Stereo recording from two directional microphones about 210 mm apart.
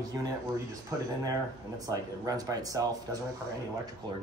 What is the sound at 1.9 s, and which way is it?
Speech, 15° right (ahead or behind).